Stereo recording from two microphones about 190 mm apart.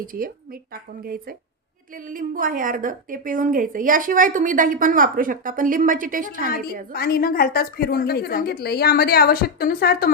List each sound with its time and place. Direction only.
0.0 s a woman's voice: 45° right (ahead or behind)
6.9 s a woman's voice: 55° left (ahead or behind)